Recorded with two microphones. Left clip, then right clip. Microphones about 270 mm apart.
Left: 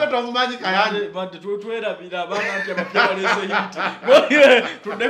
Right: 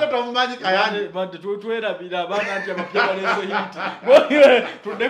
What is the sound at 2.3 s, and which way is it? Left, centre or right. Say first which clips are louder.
Speech: left 3 dB; left.